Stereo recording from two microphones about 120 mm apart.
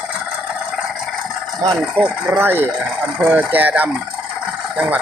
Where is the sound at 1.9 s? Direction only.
10° right (ahead or behind).